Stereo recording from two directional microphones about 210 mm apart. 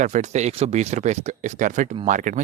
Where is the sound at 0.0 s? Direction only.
35° right (ahead or behind).